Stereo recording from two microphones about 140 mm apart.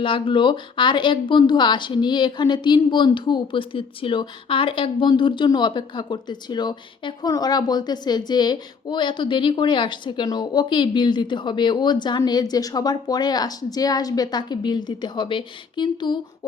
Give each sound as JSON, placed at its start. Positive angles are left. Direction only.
{"t": 0.0, "sound": "speech", "side_deg": 35}